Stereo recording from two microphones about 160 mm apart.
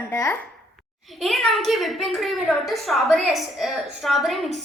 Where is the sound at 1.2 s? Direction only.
Centre (ahead or behind).